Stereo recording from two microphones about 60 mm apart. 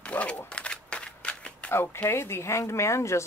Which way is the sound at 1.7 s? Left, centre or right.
Left.